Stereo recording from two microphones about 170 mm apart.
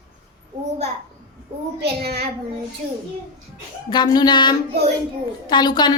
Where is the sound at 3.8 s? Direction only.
25° left (ahead or behind).